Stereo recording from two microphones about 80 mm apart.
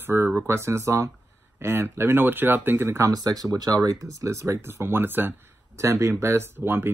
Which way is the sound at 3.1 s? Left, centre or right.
Right.